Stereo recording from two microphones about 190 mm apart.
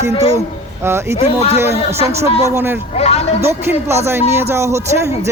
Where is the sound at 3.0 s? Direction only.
35° left (ahead or behind).